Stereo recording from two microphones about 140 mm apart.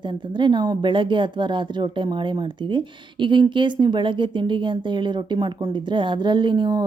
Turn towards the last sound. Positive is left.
turn(degrees=-30)  # may be behind; listen again after turning